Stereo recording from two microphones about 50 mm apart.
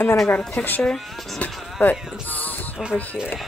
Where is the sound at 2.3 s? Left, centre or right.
Left.